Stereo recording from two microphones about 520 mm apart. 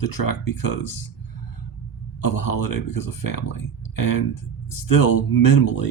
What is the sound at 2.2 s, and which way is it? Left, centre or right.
Speech, left.